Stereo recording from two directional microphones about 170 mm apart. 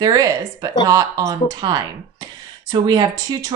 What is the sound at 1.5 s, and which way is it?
Speech, 25° right (ahead or behind).